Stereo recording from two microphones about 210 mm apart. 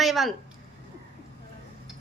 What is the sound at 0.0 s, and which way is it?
Speech, centre (ahead or behind).